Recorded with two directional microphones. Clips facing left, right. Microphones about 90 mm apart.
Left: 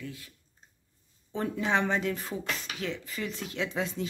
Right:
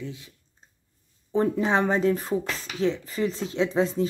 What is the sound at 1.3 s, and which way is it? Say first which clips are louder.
Speech: right 6 dB; 35° right (ahead or behind).